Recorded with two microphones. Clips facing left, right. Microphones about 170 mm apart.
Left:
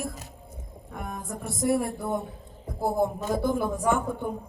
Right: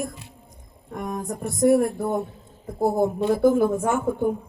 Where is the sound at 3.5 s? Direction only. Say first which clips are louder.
Right 7 dB; 50° right (ahead or behind).